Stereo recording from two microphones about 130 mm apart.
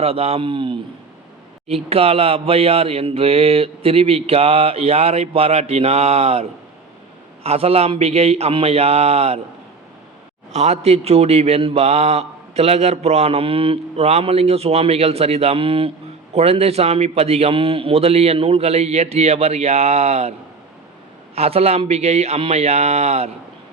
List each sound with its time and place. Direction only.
0.0 s a man's voice: 50° right (ahead or behind)
10.5 s a man's voice: 55° right (ahead or behind)
21.3 s a man's voice: 50° right (ahead or behind)